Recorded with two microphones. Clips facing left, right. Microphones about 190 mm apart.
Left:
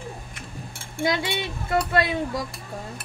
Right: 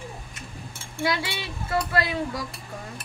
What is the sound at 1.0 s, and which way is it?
Speech, 20° left (ahead or behind).